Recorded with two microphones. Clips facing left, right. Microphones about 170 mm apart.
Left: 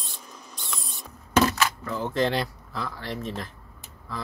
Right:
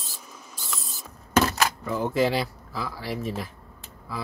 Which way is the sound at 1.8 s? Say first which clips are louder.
Right 4 dB; 10° right (ahead or behind).